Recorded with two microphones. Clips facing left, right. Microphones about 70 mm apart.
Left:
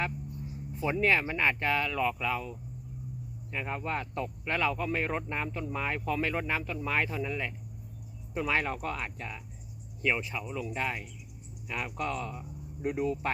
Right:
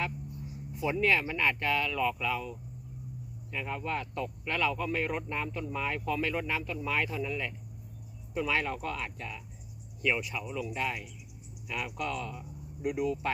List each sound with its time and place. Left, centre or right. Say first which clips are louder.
0.9 s speech: left 1 dB; left